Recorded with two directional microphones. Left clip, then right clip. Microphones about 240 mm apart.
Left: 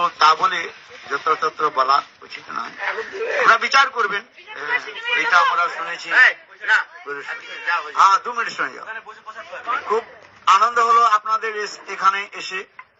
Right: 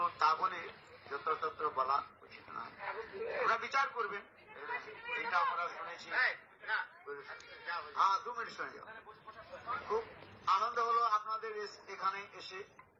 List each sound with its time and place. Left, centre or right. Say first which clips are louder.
0.0 s a man's voice: left 16 dB; left
10.4 s a man's voice: left 18 dB; left